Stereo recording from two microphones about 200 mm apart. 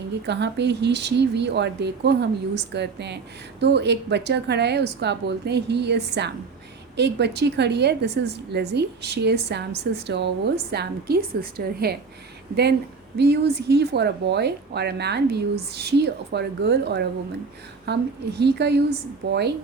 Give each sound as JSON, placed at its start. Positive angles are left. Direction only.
{"t": 0.3, "sound": "a woman's voice", "side_deg": -60}
{"t": 13.1, "sound": "a woman's voice", "side_deg": -55}